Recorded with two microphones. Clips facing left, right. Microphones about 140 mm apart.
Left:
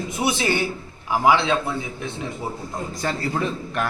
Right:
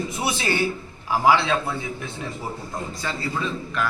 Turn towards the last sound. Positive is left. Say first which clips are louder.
# left 2 dB
turn(degrees=50)  # may be behind; listen again after turning